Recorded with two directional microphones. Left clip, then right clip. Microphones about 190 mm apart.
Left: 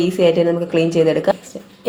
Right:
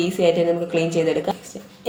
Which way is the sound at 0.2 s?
30° left (ahead or behind).